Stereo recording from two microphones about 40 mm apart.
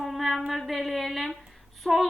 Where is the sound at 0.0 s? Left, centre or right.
Centre.